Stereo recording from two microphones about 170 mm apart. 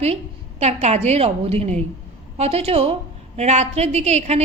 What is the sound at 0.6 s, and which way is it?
A woman's voice, 40° right (ahead or behind).